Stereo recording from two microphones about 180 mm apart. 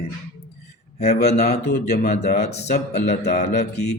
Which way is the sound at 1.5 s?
65° left (ahead or behind).